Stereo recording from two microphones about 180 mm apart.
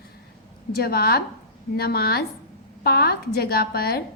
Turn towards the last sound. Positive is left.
turn(degrees=60)  # may be behind; listen again after turning